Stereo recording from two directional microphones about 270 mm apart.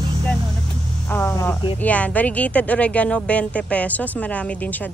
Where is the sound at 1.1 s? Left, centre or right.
Centre.